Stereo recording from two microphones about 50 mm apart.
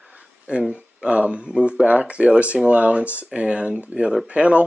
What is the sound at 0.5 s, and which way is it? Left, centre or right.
Speech, right.